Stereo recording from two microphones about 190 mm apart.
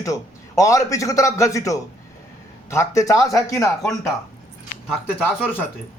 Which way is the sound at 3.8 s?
Centre (ahead or behind).